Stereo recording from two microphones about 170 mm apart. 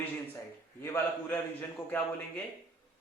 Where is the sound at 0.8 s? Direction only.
15° left (ahead or behind).